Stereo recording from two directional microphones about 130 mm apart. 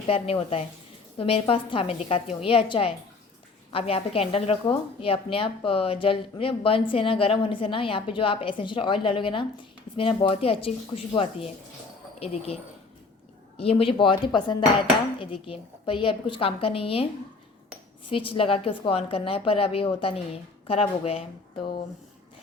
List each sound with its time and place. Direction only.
0.1 s a woman's voice: 45° left (ahead or behind)
13.6 s a woman's voice: 45° left (ahead or behind)
18.1 s a woman's voice: 45° left (ahead or behind)